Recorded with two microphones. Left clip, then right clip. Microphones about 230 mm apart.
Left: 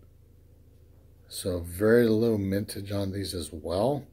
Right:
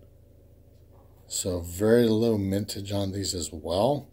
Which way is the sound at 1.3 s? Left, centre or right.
Centre.